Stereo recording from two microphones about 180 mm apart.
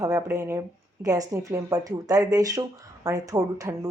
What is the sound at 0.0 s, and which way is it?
Speech, 15° right (ahead or behind).